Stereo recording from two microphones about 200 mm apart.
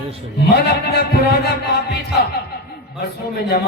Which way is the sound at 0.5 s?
55° left (ahead or behind).